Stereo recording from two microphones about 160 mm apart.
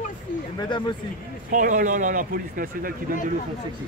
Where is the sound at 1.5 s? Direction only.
55° right (ahead or behind).